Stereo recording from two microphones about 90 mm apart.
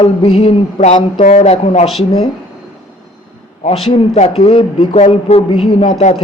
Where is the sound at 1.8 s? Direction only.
90° left.